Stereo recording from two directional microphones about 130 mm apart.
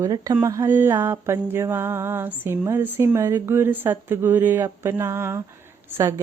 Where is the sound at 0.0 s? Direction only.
25° right (ahead or behind).